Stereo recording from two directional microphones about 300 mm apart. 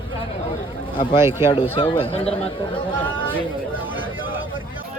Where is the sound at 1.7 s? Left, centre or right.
Centre.